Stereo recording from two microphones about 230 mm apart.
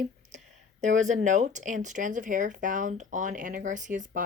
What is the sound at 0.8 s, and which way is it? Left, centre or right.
Speech, right.